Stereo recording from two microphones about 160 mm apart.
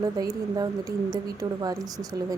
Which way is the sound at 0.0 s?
25° right (ahead or behind).